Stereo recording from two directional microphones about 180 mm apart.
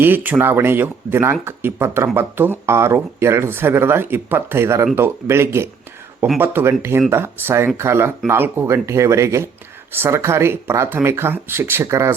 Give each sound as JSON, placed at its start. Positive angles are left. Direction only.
{"t": 0.0, "sound": "speech", "side_deg": -10}